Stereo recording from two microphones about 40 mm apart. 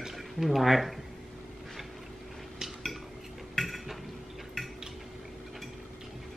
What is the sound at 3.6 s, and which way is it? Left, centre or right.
Cutlery, centre.